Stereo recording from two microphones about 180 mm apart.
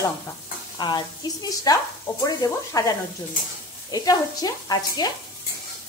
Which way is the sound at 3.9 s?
20° left (ahead or behind).